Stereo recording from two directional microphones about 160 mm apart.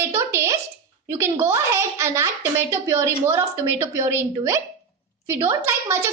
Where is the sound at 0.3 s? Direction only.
15° right (ahead or behind).